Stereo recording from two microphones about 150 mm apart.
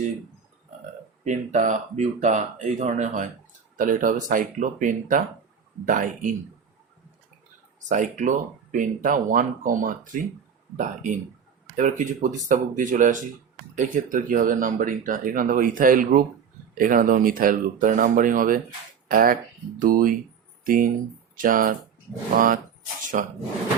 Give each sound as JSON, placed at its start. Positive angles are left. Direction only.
{"t": 1.2, "sound": "speech", "side_deg": -55}
{"t": 7.9, "sound": "speech", "side_deg": -55}